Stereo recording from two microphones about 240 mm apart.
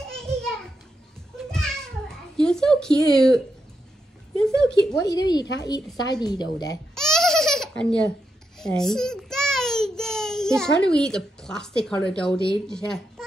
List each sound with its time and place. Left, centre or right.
0.0 s a sound: centre
4.9 s a woman's voice: centre
7.0 s baby laughter: centre
8.5 s a child's voice: centre